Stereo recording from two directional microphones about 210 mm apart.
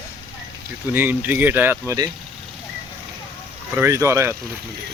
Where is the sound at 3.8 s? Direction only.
15° right (ahead or behind).